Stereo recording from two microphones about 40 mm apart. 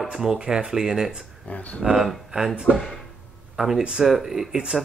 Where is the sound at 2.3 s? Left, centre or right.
Right.